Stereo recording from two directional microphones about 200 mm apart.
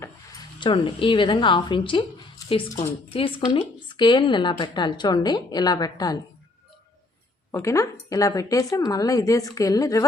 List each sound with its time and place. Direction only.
0.6 s a woman's voice: 25° left (ahead or behind)
7.5 s a woman's voice: 15° left (ahead or behind)